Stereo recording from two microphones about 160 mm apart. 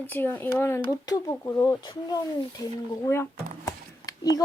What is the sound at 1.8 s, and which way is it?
Speech, 25° left (ahead or behind).